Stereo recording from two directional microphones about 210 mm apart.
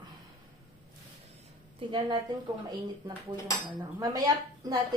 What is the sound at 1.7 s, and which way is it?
Speech, 20° right (ahead or behind).